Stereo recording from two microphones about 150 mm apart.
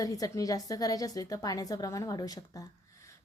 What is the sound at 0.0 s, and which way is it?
Speech, 25° left (ahead or behind).